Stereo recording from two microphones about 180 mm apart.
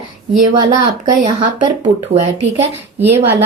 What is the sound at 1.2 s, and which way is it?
Speech, 30° right (ahead or behind).